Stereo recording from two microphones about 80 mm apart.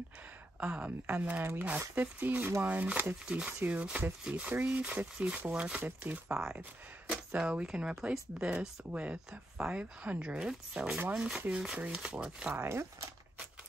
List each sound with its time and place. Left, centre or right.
0.6 s speech: centre
12.5 s speech: right